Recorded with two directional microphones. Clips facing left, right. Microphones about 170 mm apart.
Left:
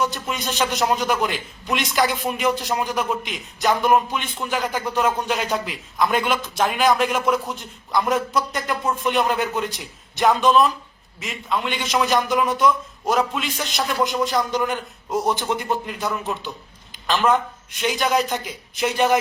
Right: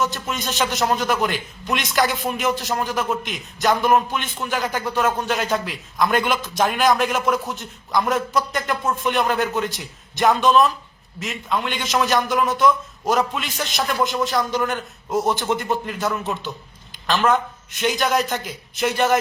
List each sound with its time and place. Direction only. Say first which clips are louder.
0.0 s a man's voice: even; centre (ahead or behind)